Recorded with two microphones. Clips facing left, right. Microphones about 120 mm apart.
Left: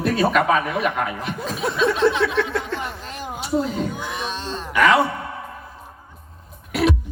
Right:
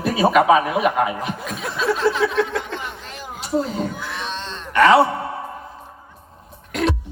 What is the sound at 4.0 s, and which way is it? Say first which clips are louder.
Cat: left 1 dB; 15° left (ahead or behind).